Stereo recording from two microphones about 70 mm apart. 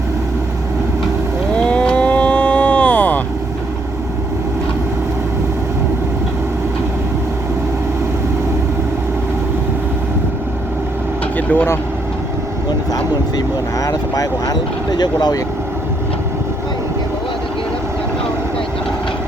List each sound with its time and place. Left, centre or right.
1.5 s cattle: centre
11.3 s vehicle: left
12.9 s vehicle: left